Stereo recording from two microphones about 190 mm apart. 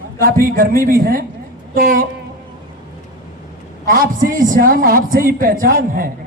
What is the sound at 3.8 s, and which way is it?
A man's voice, 50° right (ahead or behind).